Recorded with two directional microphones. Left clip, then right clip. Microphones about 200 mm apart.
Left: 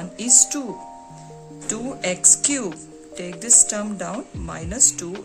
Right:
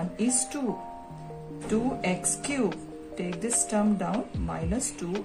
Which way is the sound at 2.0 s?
55° left (ahead or behind).